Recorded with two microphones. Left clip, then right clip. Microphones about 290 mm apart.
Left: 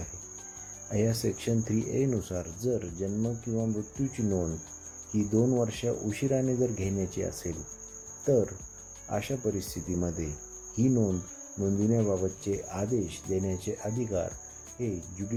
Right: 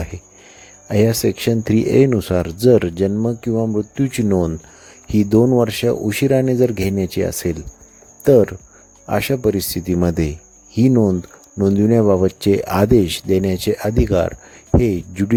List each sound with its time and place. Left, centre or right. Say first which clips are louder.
0.9 s speech: right 14 dB; right